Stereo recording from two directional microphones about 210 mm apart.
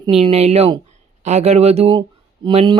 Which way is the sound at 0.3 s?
30° right (ahead or behind).